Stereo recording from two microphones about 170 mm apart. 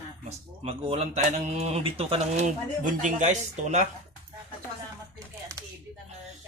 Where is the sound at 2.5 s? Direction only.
45° right (ahead or behind).